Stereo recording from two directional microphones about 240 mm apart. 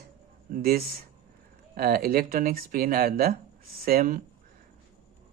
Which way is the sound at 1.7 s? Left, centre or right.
Right.